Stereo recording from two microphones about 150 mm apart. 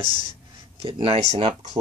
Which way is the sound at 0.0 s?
55° left (ahead or behind).